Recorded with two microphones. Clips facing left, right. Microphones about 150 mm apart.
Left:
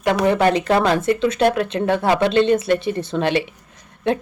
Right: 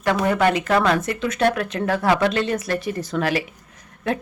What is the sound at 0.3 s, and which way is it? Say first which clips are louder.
Speech: left 3 dB; 30° left (ahead or behind).